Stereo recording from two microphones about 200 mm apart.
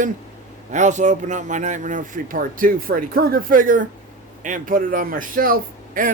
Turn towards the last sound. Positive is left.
turn(degrees=-45)  # may be behind; listen again after turning